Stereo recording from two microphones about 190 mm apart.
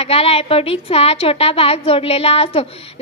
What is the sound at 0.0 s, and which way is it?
A woman's voice, 30° left (ahead or behind).